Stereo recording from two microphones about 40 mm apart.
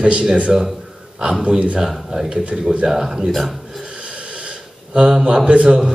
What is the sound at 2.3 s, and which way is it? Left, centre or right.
Speech, right.